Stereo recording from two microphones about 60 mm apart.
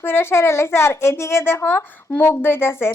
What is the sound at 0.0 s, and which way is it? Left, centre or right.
A woman's voice, left.